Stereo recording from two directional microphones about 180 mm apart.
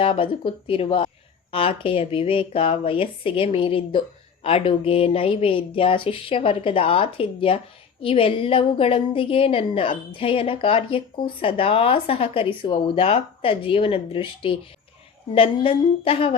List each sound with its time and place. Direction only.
0.0 s a woman's voice: 30° left (ahead or behind)